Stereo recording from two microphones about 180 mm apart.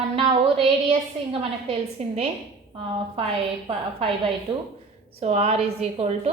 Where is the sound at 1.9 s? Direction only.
35° right (ahead or behind).